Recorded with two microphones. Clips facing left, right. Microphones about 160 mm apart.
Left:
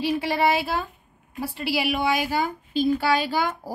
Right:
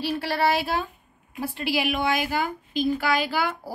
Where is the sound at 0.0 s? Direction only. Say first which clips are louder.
Left 2 dB; 15° left (ahead or behind).